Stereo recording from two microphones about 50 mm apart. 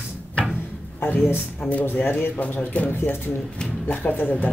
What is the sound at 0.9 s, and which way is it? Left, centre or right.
Speech, left.